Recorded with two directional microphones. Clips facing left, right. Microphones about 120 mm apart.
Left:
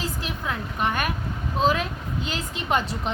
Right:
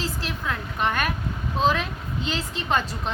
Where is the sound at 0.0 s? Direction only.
15° left (ahead or behind).